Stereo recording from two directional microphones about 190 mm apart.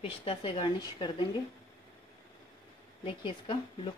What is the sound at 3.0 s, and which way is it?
Speech, 25° left (ahead or behind).